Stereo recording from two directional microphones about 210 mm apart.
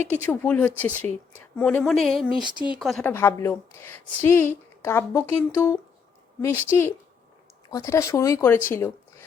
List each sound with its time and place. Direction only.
0.1 s a woman's voice: 10° left (ahead or behind)
3.1 s a woman's voice: 10° left (ahead or behind)